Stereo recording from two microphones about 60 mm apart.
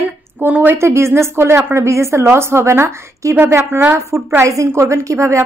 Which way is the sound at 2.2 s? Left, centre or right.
Right.